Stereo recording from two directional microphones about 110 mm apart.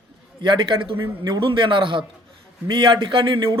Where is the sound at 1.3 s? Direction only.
45° right (ahead or behind).